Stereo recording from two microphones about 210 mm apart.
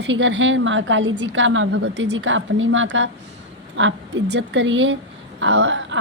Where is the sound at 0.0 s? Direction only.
60° right (ahead or behind).